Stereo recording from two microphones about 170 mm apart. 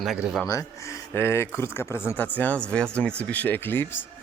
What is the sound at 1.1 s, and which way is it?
Speech, 15° left (ahead or behind).